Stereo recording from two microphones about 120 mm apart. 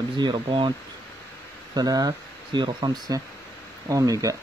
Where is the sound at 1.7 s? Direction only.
30° right (ahead or behind).